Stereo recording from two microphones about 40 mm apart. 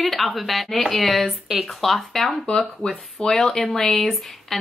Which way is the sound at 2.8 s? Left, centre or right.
Left.